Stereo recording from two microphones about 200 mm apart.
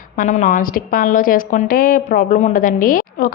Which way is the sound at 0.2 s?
40° left (ahead or behind).